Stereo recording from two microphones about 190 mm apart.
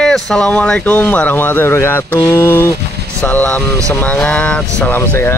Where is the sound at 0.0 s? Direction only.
Centre (ahead or behind).